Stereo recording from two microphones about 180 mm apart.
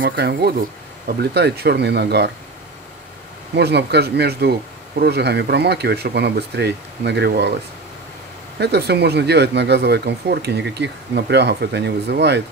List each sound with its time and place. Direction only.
0.0 s speech: 70° right (ahead or behind)
3.5 s speech: 65° right (ahead or behind)
8.5 s speech: 65° right (ahead or behind)